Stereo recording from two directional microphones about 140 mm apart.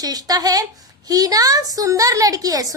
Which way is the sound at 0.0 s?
25° right (ahead or behind).